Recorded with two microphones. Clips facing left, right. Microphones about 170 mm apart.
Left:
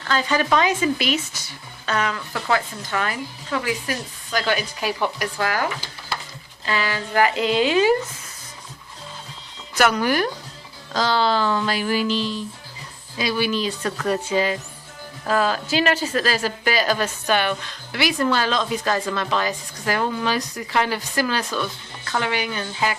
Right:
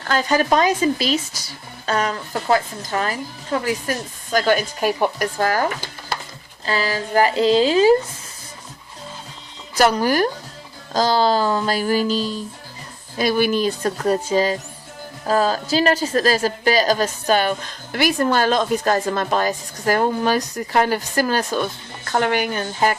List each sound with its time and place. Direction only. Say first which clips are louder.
0.0 s speech: right 3 dB; 45° right (ahead or behind)
9.7 s a woman's voice: right 3 dB; 35° right (ahead or behind)